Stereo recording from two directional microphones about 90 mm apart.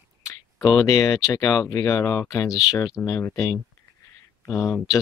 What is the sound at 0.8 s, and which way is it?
Speech, 35° left (ahead or behind).